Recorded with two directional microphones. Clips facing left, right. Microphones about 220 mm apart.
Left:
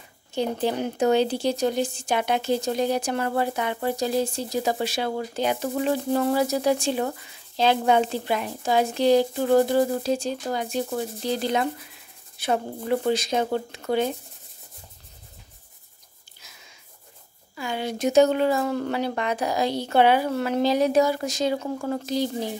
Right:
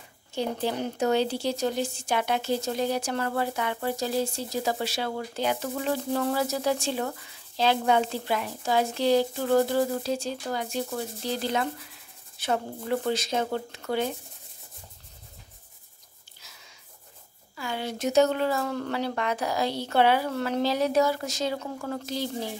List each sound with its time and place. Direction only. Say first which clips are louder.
0.3 s speech: left 4 dB; 20° left (ahead or behind)
17.6 s speech: left 4 dB; 15° left (ahead or behind)